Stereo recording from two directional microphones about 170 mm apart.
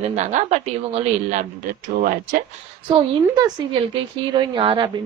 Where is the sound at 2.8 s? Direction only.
25° right (ahead or behind).